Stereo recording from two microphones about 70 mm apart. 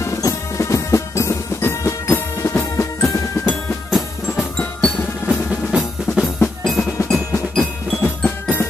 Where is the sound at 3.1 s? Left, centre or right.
Left.